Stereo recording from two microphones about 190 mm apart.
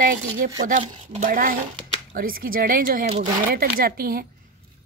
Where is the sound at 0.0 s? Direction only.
45° right (ahead or behind).